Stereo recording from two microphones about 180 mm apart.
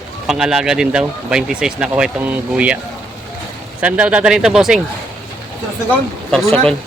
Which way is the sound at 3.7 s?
5° right (ahead or behind).